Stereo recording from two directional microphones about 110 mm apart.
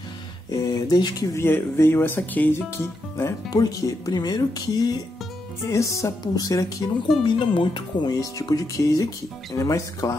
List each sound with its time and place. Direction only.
0.5 s speech: 40° left (ahead or behind)
1.3 s speech: 20° left (ahead or behind)
3.4 s speech: 35° left (ahead or behind)
7.2 s speech: 50° left (ahead or behind); by 10.1 s 30° left (ahead or behind)